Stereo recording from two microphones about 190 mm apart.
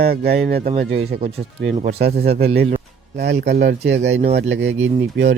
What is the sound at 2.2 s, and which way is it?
Speech, 30° right (ahead or behind).